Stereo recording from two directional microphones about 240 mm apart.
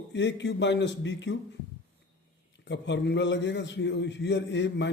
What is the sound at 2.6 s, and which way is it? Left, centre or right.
A man's voice, left.